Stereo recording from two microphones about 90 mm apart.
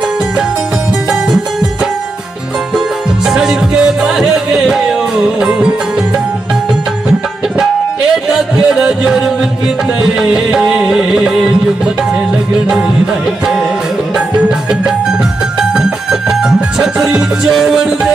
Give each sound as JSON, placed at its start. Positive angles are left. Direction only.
{"t": 1.1, "sound": "music", "side_deg": -10}
{"t": 3.3, "sound": "music", "side_deg": -5}
{"t": 8.1, "sound": "music", "side_deg": -5}